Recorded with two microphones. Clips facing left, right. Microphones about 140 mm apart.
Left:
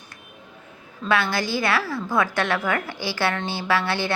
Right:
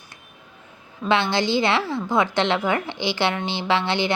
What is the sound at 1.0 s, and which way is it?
A woman's voice, 25° right (ahead or behind).